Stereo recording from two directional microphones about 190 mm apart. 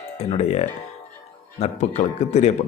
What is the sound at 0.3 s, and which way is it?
Speech, 35° left (ahead or behind).